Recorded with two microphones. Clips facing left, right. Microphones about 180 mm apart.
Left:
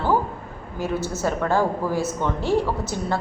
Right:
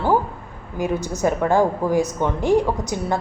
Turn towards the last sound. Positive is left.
turn(degrees=-15)  # may be behind; listen again after turning